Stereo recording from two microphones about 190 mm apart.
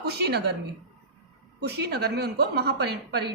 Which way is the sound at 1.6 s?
60° right (ahead or behind).